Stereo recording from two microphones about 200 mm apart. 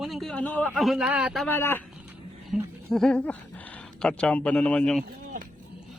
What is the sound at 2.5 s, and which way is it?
Speech, centre (ahead or behind).